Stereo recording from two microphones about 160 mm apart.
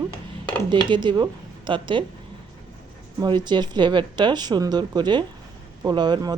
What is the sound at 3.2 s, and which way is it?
Speech, 30° right (ahead or behind).